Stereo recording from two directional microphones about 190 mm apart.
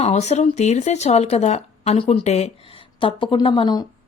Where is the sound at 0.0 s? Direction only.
35° left (ahead or behind).